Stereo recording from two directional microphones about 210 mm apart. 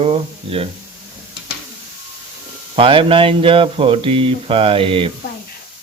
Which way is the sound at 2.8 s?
25° right (ahead or behind).